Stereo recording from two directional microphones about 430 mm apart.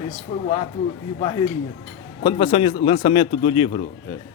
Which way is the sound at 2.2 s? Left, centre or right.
Centre.